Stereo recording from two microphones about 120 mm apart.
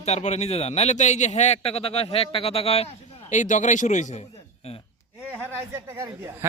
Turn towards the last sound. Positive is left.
turn(degrees=-25)  # may be behind; listen again after turning